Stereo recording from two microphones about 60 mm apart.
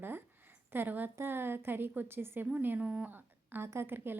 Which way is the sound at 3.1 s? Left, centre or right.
Right.